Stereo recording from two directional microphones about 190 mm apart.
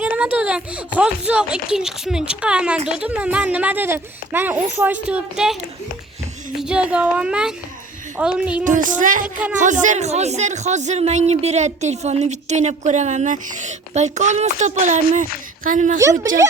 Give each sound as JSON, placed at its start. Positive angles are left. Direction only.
{"t": 0.0, "sound": "a sound", "side_deg": -5}
{"t": 1.3, "sound": "a child's voice", "side_deg": -5}
{"t": 6.6, "sound": "a child's voice", "side_deg": -5}
{"t": 8.6, "sound": "a woman's voice", "side_deg": -40}
{"t": 16.0, "sound": "speech", "side_deg": -15}